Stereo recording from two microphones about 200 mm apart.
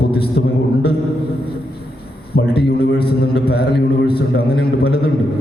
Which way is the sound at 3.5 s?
55° left (ahead or behind).